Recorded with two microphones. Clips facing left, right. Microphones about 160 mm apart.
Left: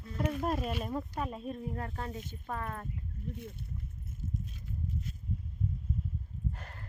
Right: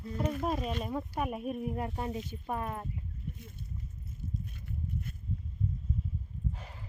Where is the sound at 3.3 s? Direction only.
60° left (ahead or behind).